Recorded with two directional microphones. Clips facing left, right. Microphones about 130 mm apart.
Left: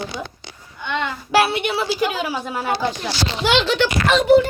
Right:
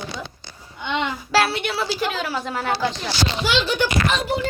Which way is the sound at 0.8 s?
20° right (ahead or behind).